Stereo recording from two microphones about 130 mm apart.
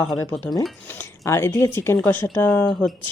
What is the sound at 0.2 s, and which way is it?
Speech, 15° left (ahead or behind).